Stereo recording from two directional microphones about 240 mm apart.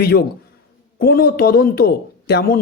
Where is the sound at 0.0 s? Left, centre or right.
Left.